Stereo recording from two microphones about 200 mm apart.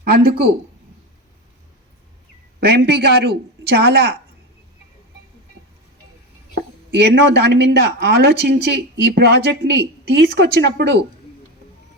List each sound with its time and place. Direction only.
0.1 s speech: 50° right (ahead or behind)
2.6 s speech: 55° right (ahead or behind)
6.5 s speech: 55° right (ahead or behind)